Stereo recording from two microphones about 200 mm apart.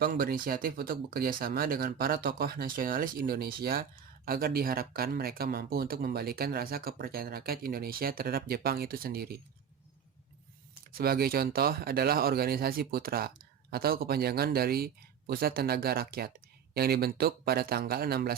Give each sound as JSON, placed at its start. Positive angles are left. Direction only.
{"t": 0.0, "sound": "speech", "side_deg": -50}
{"t": 10.9, "sound": "speech", "side_deg": -50}